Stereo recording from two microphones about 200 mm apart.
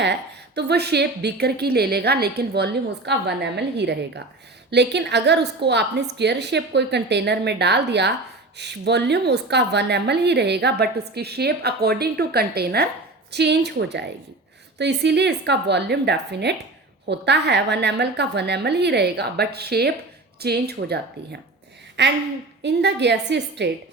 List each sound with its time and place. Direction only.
0.0 s a woman's voice: 55° right (ahead or behind)